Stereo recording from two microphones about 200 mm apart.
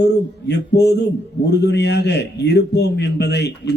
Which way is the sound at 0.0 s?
55° left (ahead or behind).